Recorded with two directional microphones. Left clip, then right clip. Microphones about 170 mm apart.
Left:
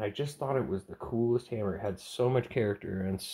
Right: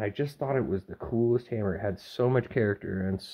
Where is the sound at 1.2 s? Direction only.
35° right (ahead or behind).